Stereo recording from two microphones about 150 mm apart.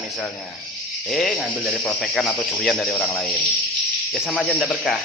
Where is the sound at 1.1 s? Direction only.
5° left (ahead or behind).